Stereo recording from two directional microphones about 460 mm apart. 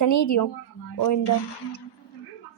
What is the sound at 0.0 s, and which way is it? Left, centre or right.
Speech, left.